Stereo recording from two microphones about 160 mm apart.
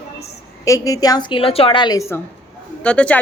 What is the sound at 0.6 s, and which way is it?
A woman's voice, 20° left (ahead or behind).